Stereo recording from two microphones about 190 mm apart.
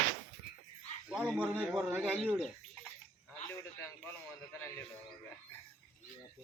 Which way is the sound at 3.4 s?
15° left (ahead or behind).